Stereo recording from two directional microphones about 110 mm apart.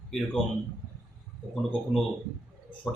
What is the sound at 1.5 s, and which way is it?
Speech, 5° left (ahead or behind).